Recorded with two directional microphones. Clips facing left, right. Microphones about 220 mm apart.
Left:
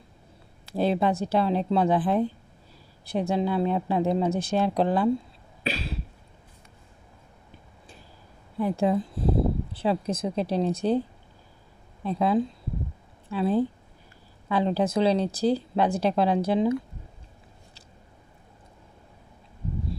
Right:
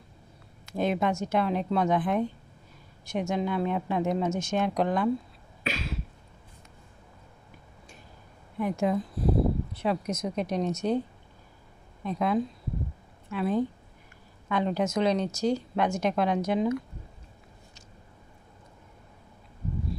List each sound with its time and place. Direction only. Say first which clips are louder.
0.7 s speech: left 3 dB; 30° left (ahead or behind)
5.6 s cough: left 2 dB; 35° left (ahead or behind)
8.5 s speech: left 3 dB; 30° left (ahead or behind)
12.0 s speech: left 3 dB; 30° left (ahead or behind)